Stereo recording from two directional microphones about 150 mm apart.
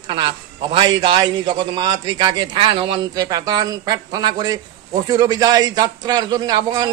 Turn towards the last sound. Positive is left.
turn(degrees=-30)  # may be behind; listen again after turning